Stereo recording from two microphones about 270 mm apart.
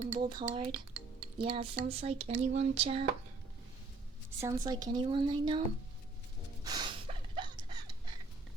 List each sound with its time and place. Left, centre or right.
0.2 s speech: centre
0.4 s cutlery: centre
4.4 s speech: centre
6.7 s gasp: centre